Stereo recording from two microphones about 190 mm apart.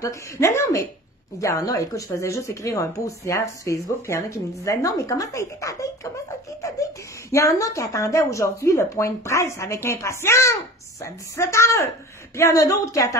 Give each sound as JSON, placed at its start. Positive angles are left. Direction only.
{"t": 0.0, "sound": "a woman's voice", "side_deg": 15}